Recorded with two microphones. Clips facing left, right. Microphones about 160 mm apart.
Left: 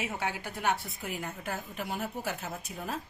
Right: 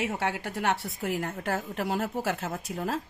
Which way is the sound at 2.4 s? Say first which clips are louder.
Right 6 dB; 70° right (ahead or behind).